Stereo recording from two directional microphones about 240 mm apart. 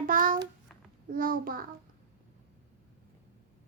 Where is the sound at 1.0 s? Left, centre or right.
Right.